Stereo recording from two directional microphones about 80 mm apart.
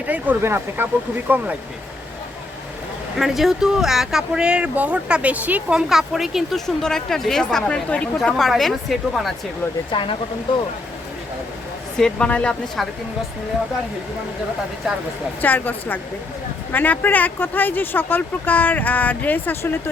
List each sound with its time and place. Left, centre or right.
0.0 s speech: centre
0.4 s speech: right
3.2 s a woman's voice: centre
8.2 s speech: centre
9.9 s speech: left
11.9 s a woman's voice: centre
14.8 s speech: centre
15.4 s speech: left